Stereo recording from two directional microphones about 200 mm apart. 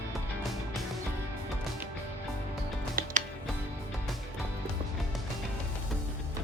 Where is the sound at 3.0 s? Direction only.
45° right (ahead or behind).